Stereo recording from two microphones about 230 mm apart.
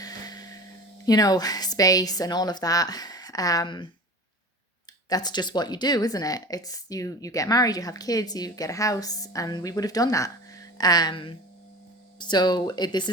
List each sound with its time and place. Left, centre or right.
0.0 s a sound: centre
1.0 s speech: centre
5.0 s speech: centre